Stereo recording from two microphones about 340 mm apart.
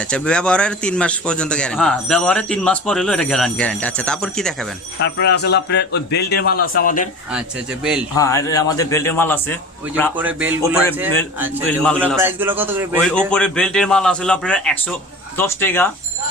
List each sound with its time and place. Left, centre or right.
0.1 s a man's voice: centre
5.1 s speech: left
8.1 s a man's voice: centre